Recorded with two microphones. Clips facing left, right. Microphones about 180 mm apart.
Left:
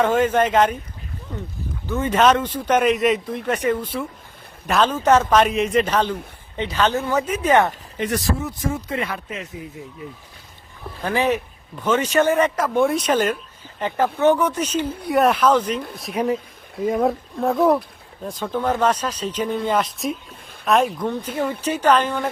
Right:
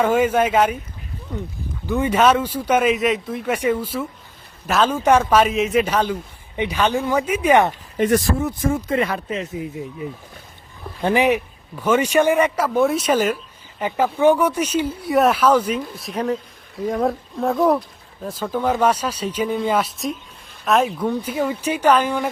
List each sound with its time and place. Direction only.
0.0 s speech: 10° right (ahead or behind)
1.9 s speech: 10° right (ahead or behind)
7.9 s speech: 50° right (ahead or behind); by 15.8 s 10° right (ahead or behind)
16.1 s speech: 10° left (ahead or behind); by 22.3 s 10° right (ahead or behind)